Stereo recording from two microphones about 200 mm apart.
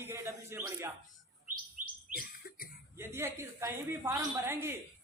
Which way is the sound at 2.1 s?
45° left (ahead or behind).